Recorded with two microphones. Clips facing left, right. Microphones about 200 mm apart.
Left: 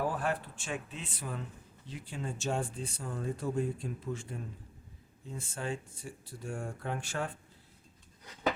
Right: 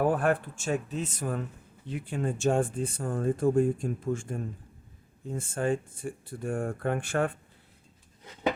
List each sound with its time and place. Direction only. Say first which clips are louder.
0.0 s speech: right 8 dB; 55° right (ahead or behind)